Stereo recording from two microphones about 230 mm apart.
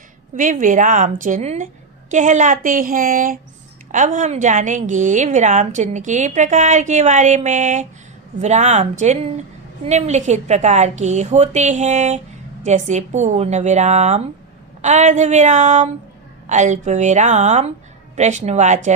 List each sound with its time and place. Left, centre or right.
0.3 s a woman's voice: right